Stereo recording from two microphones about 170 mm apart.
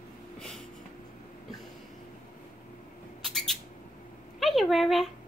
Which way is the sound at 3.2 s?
Centre (ahead or behind).